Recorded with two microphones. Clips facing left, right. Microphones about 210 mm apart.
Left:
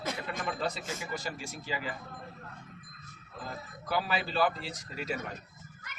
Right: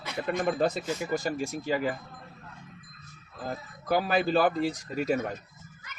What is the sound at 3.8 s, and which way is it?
Speech, 45° right (ahead or behind).